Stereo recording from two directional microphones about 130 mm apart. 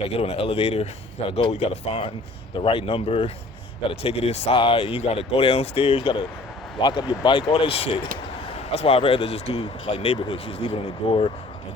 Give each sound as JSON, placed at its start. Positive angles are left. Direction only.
{"t": 0.0, "sound": "speech", "side_deg": 50}